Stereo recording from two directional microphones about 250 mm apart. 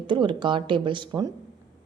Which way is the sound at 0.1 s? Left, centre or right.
Centre.